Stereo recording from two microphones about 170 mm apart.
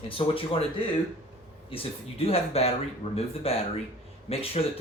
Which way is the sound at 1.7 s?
35° left (ahead or behind).